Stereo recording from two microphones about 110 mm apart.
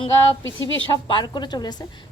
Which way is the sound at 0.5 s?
45° right (ahead or behind).